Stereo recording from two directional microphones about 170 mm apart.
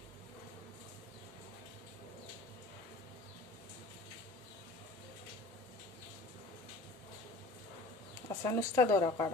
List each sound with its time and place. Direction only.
8.4 s speech: 20° left (ahead or behind)